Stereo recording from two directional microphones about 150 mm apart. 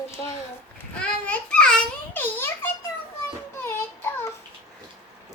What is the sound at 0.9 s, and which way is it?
A child's voice, 10° left (ahead or behind).